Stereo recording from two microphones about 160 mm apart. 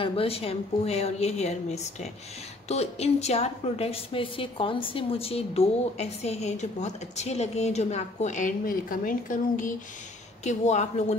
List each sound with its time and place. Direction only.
0.0 s a woman's voice: 35° left (ahead or behind)